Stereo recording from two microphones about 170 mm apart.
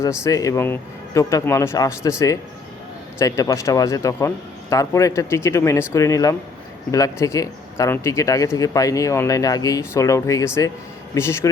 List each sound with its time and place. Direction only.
0.0 s speech: 15° left (ahead or behind)